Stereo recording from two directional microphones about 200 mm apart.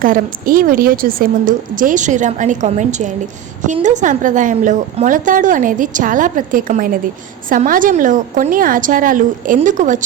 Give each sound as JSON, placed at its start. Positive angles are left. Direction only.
{"t": 0.0, "sound": "a woman's voice", "side_deg": -45}